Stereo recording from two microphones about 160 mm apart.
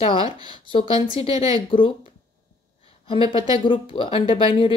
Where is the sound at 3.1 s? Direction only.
35° left (ahead or behind).